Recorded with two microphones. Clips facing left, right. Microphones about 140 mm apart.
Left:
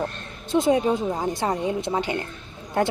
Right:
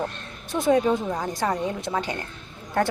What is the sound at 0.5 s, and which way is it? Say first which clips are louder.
A woman's voice: left 1 dB; 20° left (ahead or behind).